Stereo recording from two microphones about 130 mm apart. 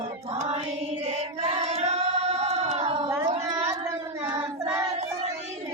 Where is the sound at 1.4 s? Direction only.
55° right (ahead or behind).